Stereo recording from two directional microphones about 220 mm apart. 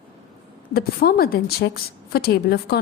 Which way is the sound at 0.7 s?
45° left (ahead or behind).